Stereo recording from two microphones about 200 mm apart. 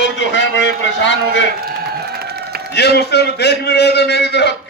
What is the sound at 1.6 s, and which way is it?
Crowd, 50° right (ahead or behind).